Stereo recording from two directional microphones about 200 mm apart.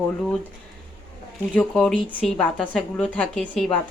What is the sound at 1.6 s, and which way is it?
Speech, 5° left (ahead or behind).